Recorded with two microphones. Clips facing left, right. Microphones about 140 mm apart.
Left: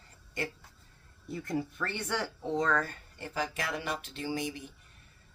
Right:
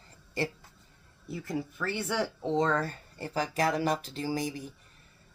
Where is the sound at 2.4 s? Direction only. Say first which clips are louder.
Right 2 dB; 25° right (ahead or behind).